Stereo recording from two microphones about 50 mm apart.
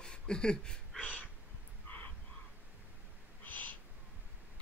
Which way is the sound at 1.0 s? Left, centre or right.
Left.